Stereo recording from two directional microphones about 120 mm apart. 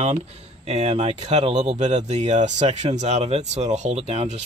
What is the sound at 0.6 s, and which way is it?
Speech, 65° right (ahead or behind).